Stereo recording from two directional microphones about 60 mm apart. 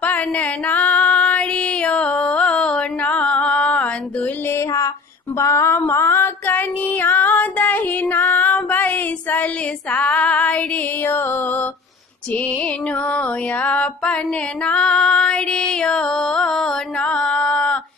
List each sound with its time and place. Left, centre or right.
0.0 s female singing: left
4.5 s a sound: left
5.4 s female singing: left
5.7 s female singing: left
9.9 s music: left
11.1 s music: left
13.1 s music: left
14.6 s female singing: centre